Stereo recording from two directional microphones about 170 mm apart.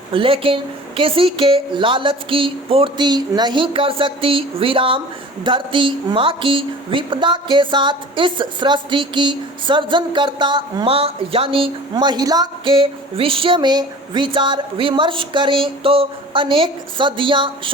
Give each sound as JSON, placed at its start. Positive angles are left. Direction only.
{"t": 0.1, "sound": "a woman's voice", "side_deg": -30}